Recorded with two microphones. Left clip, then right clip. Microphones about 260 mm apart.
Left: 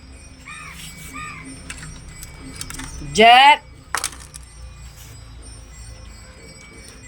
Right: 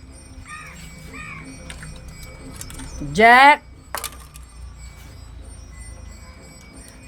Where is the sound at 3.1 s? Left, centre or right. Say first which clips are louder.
Left 1 dB; right.